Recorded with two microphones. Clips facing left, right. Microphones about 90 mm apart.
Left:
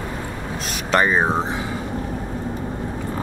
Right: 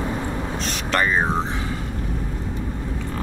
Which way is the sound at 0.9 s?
20° left (ahead or behind).